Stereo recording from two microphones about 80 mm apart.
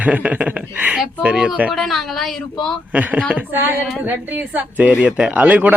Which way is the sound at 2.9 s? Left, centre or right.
Right.